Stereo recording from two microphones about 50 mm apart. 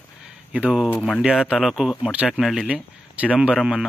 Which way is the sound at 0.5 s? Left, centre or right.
Right.